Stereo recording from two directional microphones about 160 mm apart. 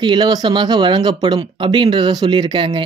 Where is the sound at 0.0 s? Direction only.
25° right (ahead or behind).